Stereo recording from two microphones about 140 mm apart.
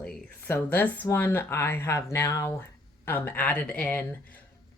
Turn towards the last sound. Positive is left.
turn(degrees=10)  # may be behind; listen again after turning